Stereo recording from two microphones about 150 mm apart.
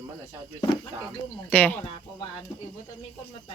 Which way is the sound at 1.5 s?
10° left (ahead or behind).